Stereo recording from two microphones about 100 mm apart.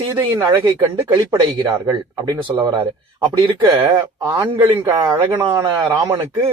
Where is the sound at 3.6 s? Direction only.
35° right (ahead or behind).